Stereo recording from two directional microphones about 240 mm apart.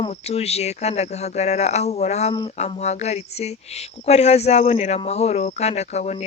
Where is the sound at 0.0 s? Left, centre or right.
Left.